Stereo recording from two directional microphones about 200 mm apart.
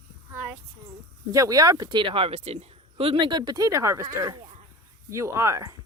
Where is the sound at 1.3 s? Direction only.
15° right (ahead or behind).